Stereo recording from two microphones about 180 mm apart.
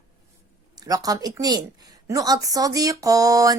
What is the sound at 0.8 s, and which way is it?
Speech, 20° right (ahead or behind).